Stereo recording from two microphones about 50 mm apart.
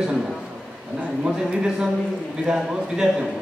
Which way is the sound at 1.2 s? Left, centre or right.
Centre.